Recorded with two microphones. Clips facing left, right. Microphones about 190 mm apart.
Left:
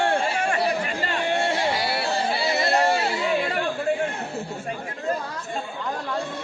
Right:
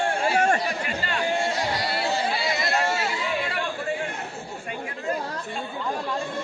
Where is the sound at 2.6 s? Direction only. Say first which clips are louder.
Left 6 dB; 35° left (ahead or behind).